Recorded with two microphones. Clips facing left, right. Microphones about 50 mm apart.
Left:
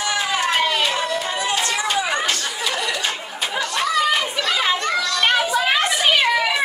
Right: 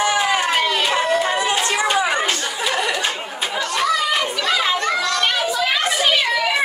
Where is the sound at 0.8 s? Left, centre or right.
Right.